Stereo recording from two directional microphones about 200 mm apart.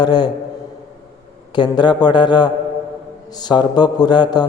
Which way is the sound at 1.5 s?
20° left (ahead or behind).